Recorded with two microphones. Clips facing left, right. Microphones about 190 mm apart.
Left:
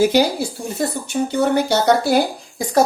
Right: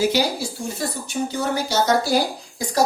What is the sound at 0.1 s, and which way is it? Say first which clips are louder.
Speech: left 5 dB; 55° left (ahead or behind).